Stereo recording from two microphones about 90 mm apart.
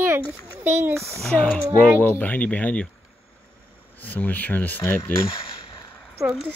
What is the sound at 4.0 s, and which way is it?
Speech, 20° left (ahead or behind).